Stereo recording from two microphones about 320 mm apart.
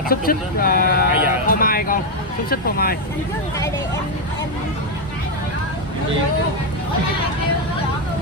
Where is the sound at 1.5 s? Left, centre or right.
Left.